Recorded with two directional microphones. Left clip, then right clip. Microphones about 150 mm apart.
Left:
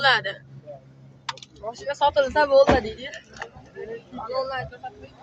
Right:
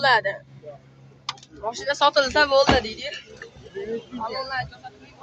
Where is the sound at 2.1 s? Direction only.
50° right (ahead or behind).